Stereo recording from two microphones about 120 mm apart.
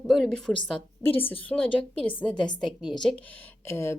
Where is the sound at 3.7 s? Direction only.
25° left (ahead or behind).